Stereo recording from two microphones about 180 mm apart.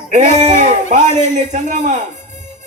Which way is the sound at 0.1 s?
40° right (ahead or behind).